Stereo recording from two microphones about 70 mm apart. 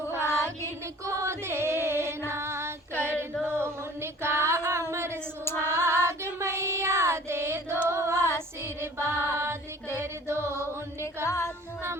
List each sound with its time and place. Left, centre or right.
1.0 s music: right
3.0 s female singing: right
3.4 s a sound: right
5.5 s child singing: right
7.9 s female singing: right
8.6 s music: right
11.3 s music: left